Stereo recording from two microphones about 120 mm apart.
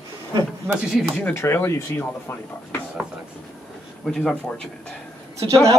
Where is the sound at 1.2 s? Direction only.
20° left (ahead or behind).